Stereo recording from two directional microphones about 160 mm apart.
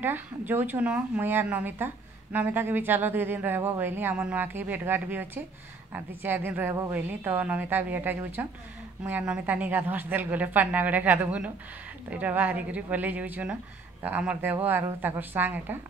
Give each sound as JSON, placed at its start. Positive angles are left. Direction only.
{"t": 0.5, "sound": "speech", "side_deg": -10}